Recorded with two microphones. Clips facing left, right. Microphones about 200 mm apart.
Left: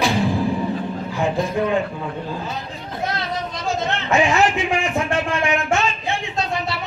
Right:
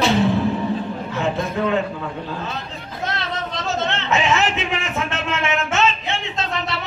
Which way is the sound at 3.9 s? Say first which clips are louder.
Left 3 dB; 20° right (ahead or behind).